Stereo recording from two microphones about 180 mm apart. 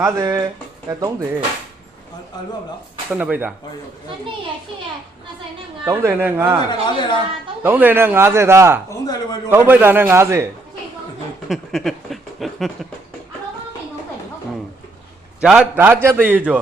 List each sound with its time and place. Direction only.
0.0 s a man's voice: 15° right (ahead or behind)
3.2 s a man's voice: 10° right (ahead or behind)
5.8 s a man's voice: 15° right (ahead or behind)
6.7 s speech: 25° left (ahead or behind)
7.6 s a man's voice: 10° right (ahead or behind)
8.9 s speech: 20° left (ahead or behind)
9.5 s a man's voice: 10° right (ahead or behind)
11.4 s a sound: centre (ahead or behind)
15.4 s a man's voice: 5° right (ahead or behind)